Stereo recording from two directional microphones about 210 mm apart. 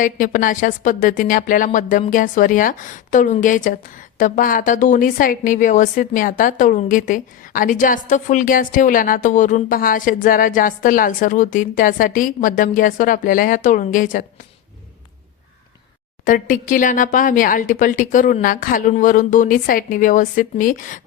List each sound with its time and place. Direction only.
0.0 s a woman's voice: 40° left (ahead or behind)
16.2 s a woman's voice: 40° left (ahead or behind)